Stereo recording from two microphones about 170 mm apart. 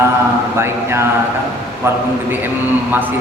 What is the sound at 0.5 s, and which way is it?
A man's voice, 15° right (ahead or behind).